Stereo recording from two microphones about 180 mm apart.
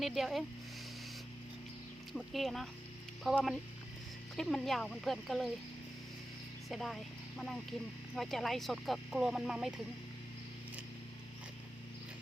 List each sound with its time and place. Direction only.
0.0 s speech: centre (ahead or behind)
2.1 s speech: centre (ahead or behind)
6.7 s speech: centre (ahead or behind)